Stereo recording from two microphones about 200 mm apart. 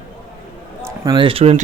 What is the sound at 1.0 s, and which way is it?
Speech, 25° right (ahead or behind).